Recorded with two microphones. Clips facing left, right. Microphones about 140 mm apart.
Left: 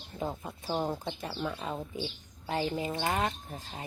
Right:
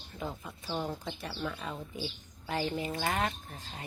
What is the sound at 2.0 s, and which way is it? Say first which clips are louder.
Speech: left 2 dB; 30° left (ahead or behind).